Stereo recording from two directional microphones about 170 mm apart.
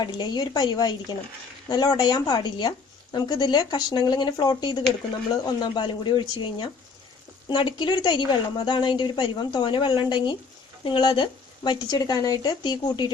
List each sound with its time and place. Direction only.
0.0 s speech: 25° left (ahead or behind)